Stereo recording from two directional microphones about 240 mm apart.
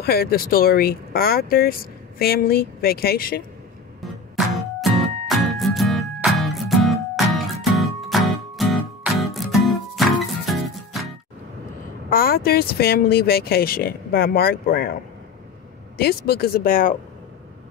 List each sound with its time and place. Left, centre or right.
0.0 s speech: left
4.6 s music: centre
12.1 s speech: left
16.0 s speech: left